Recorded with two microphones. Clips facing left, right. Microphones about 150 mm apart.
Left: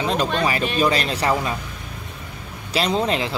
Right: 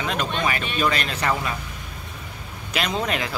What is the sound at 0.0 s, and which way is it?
Speech, 35° left (ahead or behind).